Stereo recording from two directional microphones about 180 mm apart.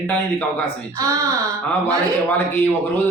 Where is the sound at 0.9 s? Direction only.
20° right (ahead or behind).